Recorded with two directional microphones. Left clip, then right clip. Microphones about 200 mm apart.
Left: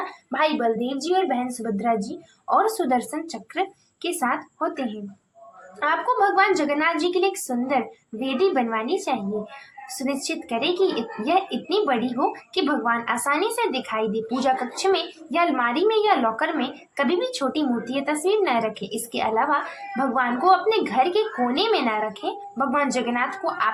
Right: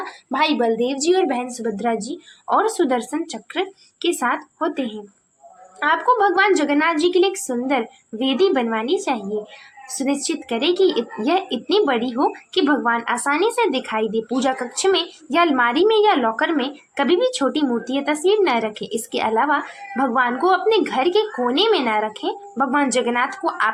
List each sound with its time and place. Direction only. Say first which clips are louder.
0.3 s a woman's voice: right 3 dB; 35° right (ahead or behind)